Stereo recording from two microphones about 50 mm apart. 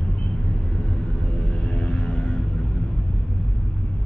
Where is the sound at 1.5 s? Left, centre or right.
Left.